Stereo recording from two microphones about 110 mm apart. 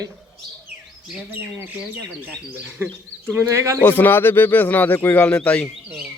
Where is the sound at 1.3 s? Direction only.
20° right (ahead or behind).